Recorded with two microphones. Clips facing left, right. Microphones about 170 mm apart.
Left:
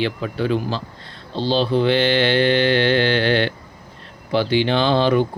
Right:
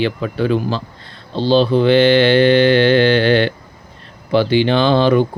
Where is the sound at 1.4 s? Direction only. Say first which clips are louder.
Right 5 dB; 55° right (ahead or behind).